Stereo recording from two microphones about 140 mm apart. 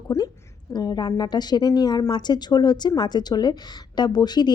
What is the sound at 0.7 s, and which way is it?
A woman's voice, 30° left (ahead or behind).